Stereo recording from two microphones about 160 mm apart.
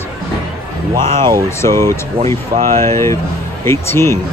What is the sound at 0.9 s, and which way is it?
Speech, 30° right (ahead or behind).